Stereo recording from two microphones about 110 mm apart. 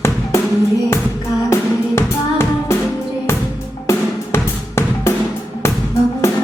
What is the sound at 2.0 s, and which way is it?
Music, 25° left (ahead or behind).